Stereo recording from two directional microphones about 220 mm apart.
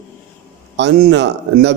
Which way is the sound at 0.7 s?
50° right (ahead or behind).